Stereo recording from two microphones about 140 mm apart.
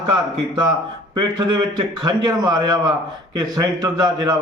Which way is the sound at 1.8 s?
30° right (ahead or behind).